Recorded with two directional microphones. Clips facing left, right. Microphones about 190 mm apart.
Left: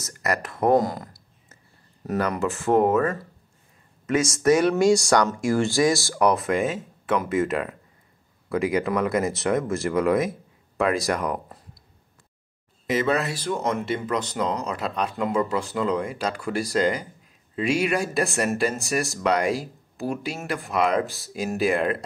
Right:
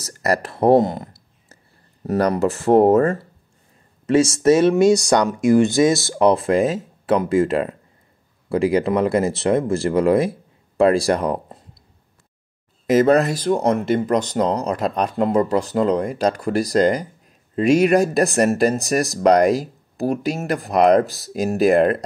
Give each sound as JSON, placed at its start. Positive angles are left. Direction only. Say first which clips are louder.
{"t": 0.0, "sound": "speech", "louder": "right 6 dB", "side_deg": -35}
{"t": 2.0, "sound": "speech", "louder": "right 6 dB", "side_deg": -35}
{"t": 12.8, "sound": "speech", "louder": "right 9 dB", "side_deg": -45}